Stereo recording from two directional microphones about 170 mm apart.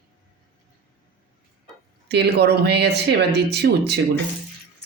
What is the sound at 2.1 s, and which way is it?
Speech, 75° right (ahead or behind).